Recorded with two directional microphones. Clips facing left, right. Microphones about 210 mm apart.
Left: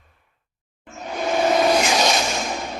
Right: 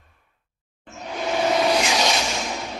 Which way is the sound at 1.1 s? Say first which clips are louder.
Left 2 dB; 50° left (ahead or behind).